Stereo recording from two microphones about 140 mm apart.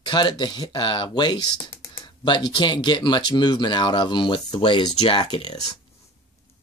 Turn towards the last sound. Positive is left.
turn(degrees=30)  # may be behind; listen again after turning